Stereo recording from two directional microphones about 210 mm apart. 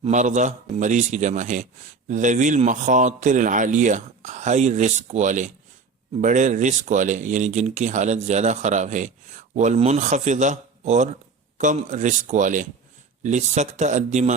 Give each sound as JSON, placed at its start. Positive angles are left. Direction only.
{"t": 0.0, "sound": "speech", "side_deg": -35}